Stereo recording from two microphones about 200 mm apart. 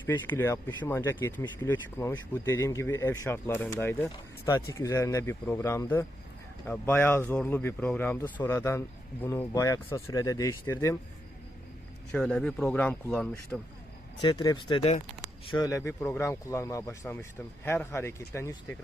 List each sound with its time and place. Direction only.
0.0 s speech: 10° left (ahead or behind)
12.1 s speech: 5° left (ahead or behind)
14.2 s speech: 20° left (ahead or behind)
15.4 s speech: 20° left (ahead or behind)